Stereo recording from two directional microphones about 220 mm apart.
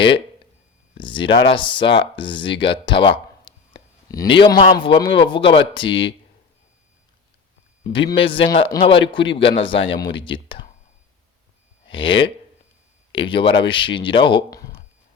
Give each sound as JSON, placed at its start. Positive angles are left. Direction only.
{"t": 0.9, "sound": "speech", "side_deg": 20}
{"t": 7.9, "sound": "speech", "side_deg": 25}
{"t": 11.9, "sound": "speech", "side_deg": 25}